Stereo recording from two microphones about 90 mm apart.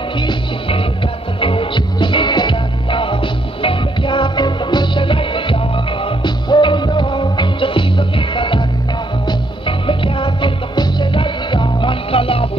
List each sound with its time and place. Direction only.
0.2 s music: 70° left (ahead or behind)
6.0 s music: 60° left (ahead or behind)
9.7 s music: 70° left (ahead or behind); by 12.4 s 90° left